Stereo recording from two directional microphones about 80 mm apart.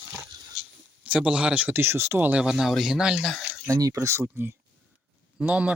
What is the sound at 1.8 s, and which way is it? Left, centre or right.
Speech, right.